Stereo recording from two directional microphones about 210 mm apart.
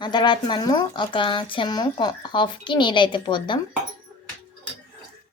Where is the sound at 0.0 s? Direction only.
20° left (ahead or behind).